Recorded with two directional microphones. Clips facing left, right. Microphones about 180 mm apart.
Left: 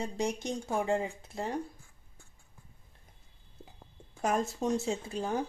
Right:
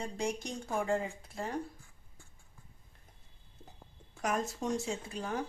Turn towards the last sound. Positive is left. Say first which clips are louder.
# left 4 dB
turn(degrees=25)  # may be behind; listen again after turning